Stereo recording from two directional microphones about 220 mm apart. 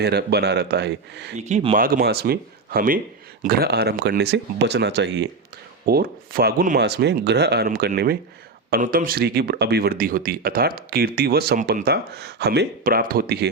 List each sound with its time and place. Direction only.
0.0 s speech: 45° right (ahead or behind)
1.4 s speech: 30° right (ahead or behind); by 13.5 s 45° right (ahead or behind)